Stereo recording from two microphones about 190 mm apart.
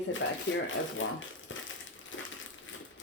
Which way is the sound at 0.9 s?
90° left.